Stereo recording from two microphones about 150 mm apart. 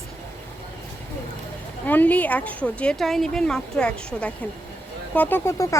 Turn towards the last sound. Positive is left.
turn(degrees=20)  # may be behind; listen again after turning